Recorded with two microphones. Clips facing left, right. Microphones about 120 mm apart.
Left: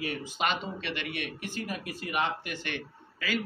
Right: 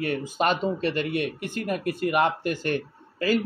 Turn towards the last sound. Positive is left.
turn(degrees=-40)  # may be behind; listen again after turning